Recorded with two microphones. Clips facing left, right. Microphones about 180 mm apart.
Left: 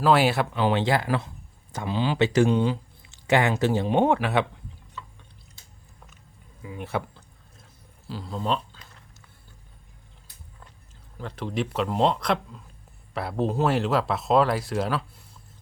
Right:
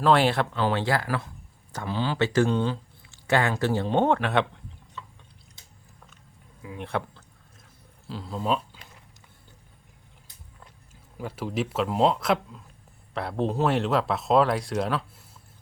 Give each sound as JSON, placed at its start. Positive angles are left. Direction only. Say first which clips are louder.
{"t": 0.0, "sound": "speech", "louder": "left 1 dB", "side_deg": 5}
{"t": 6.6, "sound": "speech", "louder": "even", "side_deg": 0}
{"t": 8.0, "sound": "a sound", "louder": "even", "side_deg": 0}
{"t": 11.2, "sound": "speech", "louder": "even", "side_deg": -5}